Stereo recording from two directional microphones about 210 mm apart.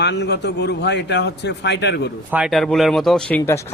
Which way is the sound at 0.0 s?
55° left (ahead or behind).